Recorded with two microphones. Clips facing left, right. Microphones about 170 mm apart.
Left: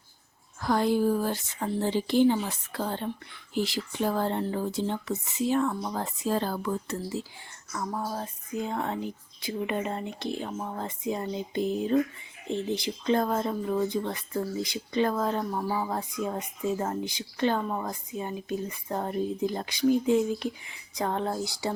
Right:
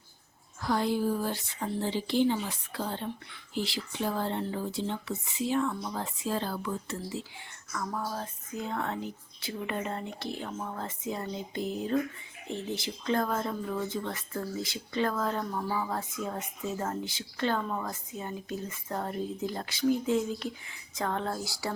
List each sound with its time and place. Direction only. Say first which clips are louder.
0.6 s speech: left 4 dB; 50° left (ahead or behind)
8.0 s speech: left 2 dB; 20° left (ahead or behind)